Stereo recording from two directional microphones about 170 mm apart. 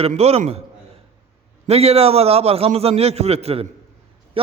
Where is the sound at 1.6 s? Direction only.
35° right (ahead or behind).